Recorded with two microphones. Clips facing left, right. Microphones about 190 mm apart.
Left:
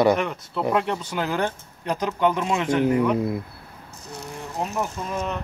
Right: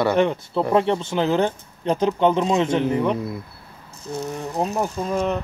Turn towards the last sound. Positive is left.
turn(degrees=-30)  # may be behind; listen again after turning